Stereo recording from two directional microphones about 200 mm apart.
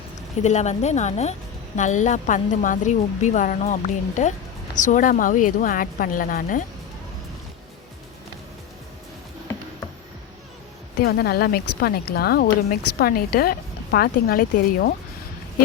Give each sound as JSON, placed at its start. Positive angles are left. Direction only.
{"t": 0.4, "sound": "a woman's voice", "side_deg": 35}
{"t": 11.0, "sound": "speech", "side_deg": 50}